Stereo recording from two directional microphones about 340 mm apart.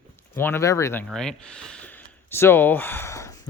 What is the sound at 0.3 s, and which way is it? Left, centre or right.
Speech, centre.